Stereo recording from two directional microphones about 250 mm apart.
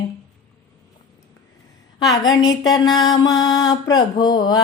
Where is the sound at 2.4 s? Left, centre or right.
Centre.